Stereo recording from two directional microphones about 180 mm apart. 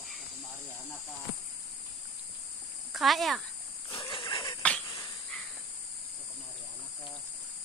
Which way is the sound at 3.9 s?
25° left (ahead or behind).